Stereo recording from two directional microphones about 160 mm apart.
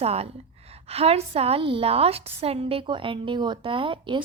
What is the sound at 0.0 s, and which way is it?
A woman's voice, 40° right (ahead or behind).